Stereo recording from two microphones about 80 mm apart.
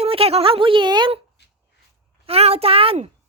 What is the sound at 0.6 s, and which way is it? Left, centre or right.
Speech, right.